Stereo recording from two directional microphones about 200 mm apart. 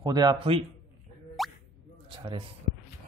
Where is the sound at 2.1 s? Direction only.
25° right (ahead or behind).